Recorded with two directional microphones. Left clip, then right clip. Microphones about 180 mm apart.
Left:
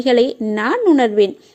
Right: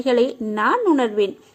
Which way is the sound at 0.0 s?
30° left (ahead or behind).